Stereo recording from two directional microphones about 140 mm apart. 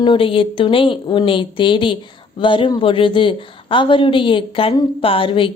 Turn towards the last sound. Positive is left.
turn(degrees=40)  # may be behind; listen again after turning